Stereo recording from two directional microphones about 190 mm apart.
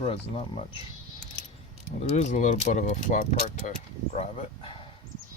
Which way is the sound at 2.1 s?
35° left (ahead or behind).